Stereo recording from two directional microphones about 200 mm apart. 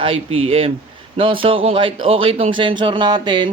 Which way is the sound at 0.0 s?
30° right (ahead or behind).